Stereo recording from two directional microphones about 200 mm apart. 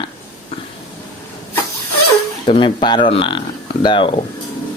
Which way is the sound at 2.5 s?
25° left (ahead or behind).